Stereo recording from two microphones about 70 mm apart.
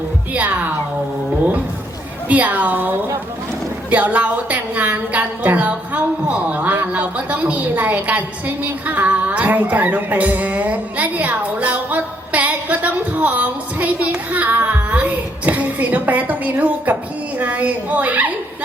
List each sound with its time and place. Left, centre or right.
0.3 s music: right
2.3 s a woman's voice: right
3.8 s a sound: right